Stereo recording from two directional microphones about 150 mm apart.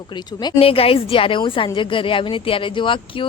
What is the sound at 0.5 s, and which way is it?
Speech, 40° left (ahead or behind).